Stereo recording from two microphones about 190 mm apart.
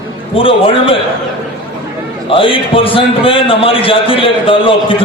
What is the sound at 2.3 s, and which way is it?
A man's voice, 30° left (ahead or behind).